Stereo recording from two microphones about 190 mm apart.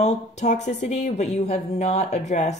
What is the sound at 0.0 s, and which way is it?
Speech, 40° left (ahead or behind).